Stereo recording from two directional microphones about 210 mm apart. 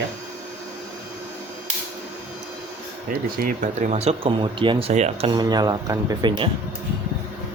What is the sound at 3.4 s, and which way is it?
Speech, 40° right (ahead or behind).